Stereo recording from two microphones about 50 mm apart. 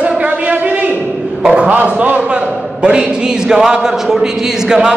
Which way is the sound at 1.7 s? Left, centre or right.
Right.